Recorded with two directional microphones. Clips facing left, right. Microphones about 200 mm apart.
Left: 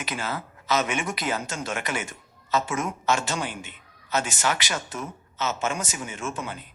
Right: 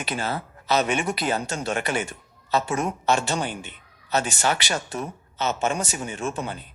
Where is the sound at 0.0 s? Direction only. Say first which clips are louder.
Right 3 dB; 30° right (ahead or behind).